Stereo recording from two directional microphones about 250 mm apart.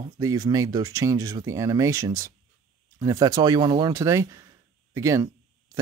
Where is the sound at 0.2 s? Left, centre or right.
Centre.